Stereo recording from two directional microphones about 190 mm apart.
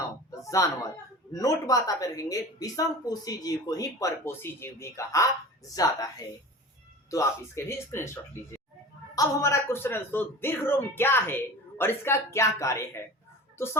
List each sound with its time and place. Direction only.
0.6 s a woman's voice: 20° left (ahead or behind)
7.1 s a woman's voice: 15° left (ahead or behind)